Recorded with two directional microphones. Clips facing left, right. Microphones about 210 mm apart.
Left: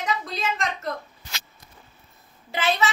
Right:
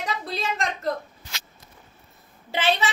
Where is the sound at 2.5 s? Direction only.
30° right (ahead or behind).